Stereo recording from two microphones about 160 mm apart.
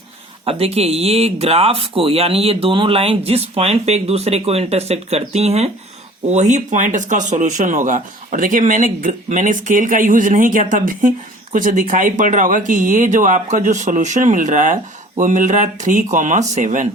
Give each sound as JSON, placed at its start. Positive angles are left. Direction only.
{"t": 0.4, "sound": "speech", "side_deg": -40}